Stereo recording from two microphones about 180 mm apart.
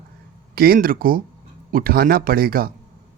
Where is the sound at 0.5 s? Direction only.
55° right (ahead or behind).